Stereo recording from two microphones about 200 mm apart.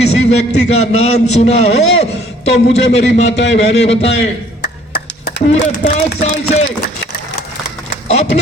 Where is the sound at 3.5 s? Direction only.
35° left (ahead or behind).